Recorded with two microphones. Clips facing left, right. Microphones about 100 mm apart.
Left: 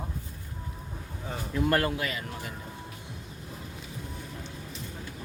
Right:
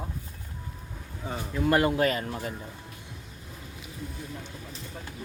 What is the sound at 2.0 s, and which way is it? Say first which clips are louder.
Speech: right 8 dB; 40° right (ahead or behind).